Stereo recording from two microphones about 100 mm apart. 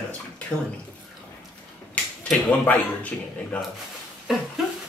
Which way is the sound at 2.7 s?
15° left (ahead or behind).